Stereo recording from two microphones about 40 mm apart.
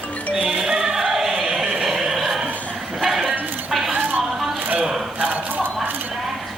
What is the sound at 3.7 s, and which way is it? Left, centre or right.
Music, centre.